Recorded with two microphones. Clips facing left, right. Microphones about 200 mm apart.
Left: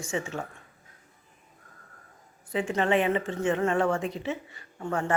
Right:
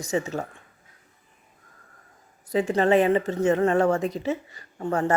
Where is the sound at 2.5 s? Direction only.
40° right (ahead or behind).